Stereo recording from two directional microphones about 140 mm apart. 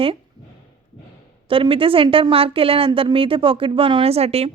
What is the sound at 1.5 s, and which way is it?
A woman's voice, 40° right (ahead or behind).